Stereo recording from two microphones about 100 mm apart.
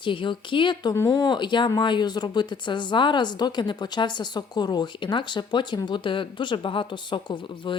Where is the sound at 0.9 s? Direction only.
35° left (ahead or behind).